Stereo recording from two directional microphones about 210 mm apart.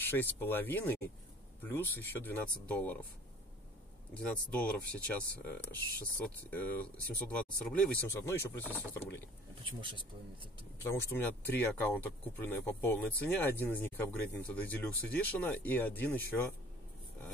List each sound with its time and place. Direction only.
0.0 s speech: 10° left (ahead or behind)
4.1 s speech: 5° left (ahead or behind)
9.7 s speech: 25° right (ahead or behind)
10.9 s speech: 10° left (ahead or behind)